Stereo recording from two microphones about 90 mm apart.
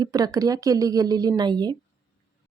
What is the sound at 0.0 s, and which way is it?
Speech, 45° right (ahead or behind).